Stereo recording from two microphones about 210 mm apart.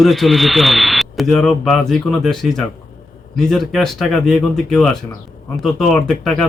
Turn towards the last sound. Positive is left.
turn(degrees=0)  # may be behind; listen again after turning